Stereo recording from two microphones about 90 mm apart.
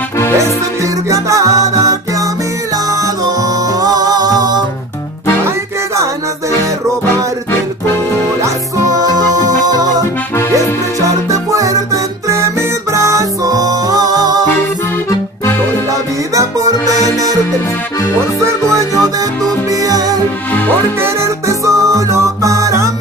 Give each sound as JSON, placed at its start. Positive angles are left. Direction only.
{"t": 1.0, "sound": "music", "side_deg": -35}
{"t": 8.4, "sound": "music", "side_deg": -40}
{"t": 10.3, "sound": "accordion", "side_deg": 35}
{"t": 11.0, "sound": "music", "side_deg": -35}
{"t": 15.9, "sound": "music", "side_deg": -40}
{"t": 18.4, "sound": "music", "side_deg": -35}
{"t": 21.0, "sound": "music", "side_deg": -35}